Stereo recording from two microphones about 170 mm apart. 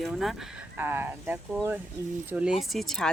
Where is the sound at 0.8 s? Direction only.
10° right (ahead or behind).